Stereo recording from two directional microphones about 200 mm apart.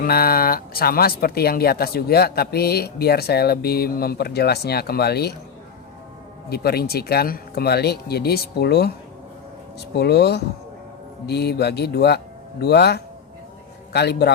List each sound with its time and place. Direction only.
0.0 s speech: 50° left (ahead or behind)
6.5 s a man's voice: 50° left (ahead or behind)